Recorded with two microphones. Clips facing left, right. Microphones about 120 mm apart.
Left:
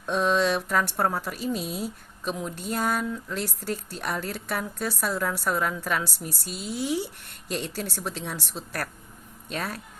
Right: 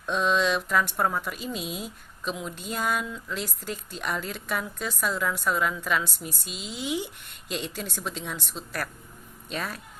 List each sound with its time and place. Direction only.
0.1 s a woman's voice: 50° left (ahead or behind)
6.1 s speech: 15° right (ahead or behind)
7.5 s a woman's voice: 45° left (ahead or behind)
9.5 s a woman's voice: 45° left (ahead or behind)